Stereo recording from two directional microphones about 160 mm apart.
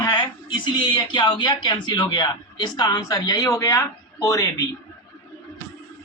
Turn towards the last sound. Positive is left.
turn(degrees=20)  # may be behind; listen again after turning